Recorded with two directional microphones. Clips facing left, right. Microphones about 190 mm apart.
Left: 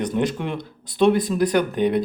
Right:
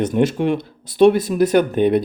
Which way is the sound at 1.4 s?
20° right (ahead or behind).